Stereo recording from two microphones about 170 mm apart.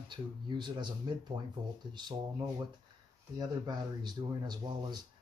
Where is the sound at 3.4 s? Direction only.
25° right (ahead or behind).